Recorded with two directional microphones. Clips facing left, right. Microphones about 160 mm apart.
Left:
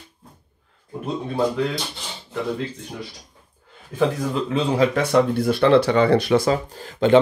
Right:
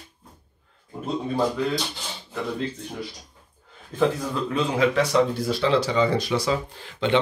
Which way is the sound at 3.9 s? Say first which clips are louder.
Left 2 dB; 20° left (ahead or behind).